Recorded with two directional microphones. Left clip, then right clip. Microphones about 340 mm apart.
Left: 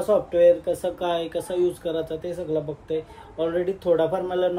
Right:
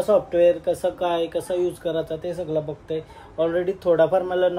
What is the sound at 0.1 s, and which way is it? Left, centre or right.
Speech, centre.